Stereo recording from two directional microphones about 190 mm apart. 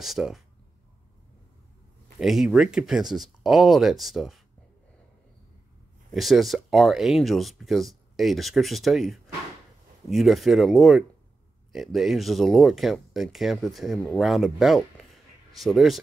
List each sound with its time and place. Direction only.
0.0 s speech: centre (ahead or behind)
2.1 s speech: centre (ahead or behind)
6.1 s speech: centre (ahead or behind)